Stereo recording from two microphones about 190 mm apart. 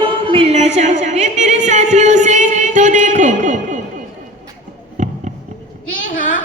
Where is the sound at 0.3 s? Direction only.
30° right (ahead or behind).